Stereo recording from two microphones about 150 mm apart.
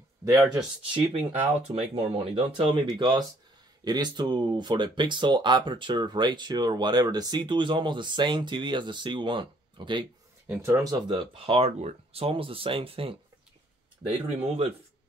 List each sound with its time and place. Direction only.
0.2 s speech: 20° right (ahead or behind)
1.8 s speech: 35° right (ahead or behind)
10.4 s speech: 15° right (ahead or behind); by 14.7 s 40° right (ahead or behind)